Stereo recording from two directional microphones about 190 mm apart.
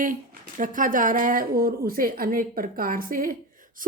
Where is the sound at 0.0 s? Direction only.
45° right (ahead or behind).